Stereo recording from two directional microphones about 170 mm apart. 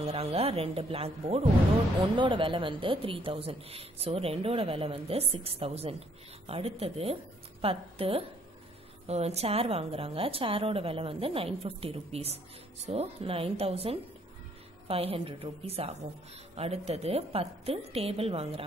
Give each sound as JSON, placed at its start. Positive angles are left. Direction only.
{"t": 0.0, "sound": "speech", "side_deg": -35}